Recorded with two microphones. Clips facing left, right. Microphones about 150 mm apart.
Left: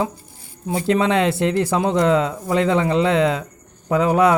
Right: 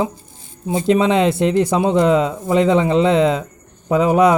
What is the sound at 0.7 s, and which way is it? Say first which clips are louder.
Speech: right 3 dB; 20° right (ahead or behind).